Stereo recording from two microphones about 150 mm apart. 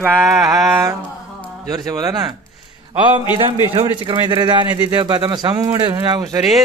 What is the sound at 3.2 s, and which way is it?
Speech, 30° left (ahead or behind).